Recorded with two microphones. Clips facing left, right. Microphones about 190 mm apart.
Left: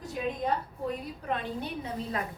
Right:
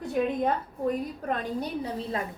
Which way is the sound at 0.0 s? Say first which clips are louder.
Right 6 dB; 55° right (ahead or behind).